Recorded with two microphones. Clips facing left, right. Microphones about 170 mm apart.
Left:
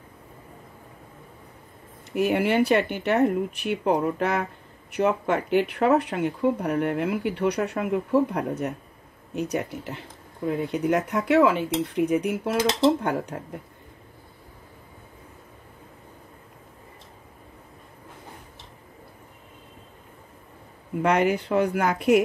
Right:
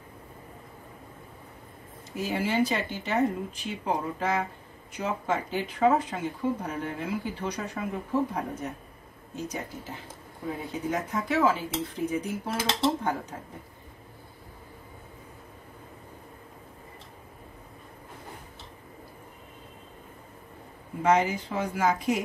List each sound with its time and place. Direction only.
2.1 s speech: 65° left (ahead or behind)
21.0 s speech: 65° left (ahead or behind)